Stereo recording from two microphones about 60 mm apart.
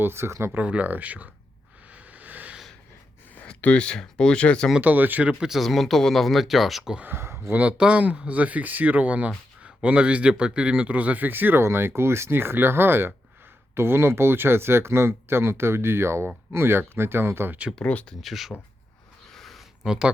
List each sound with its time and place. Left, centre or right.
0.0 s speech: right
0.5 s a man's voice: right
1.9 s a sound: right
3.6 s speech: left
4.8 s a man's voice: right
5.4 s speech: centre
7.0 s speech: right
7.5 s a man's voice: right
17.8 s speech: centre
18.2 s speech: centre
19.3 s a sound: centre